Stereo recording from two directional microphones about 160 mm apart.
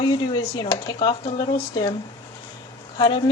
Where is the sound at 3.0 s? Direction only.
30° left (ahead or behind).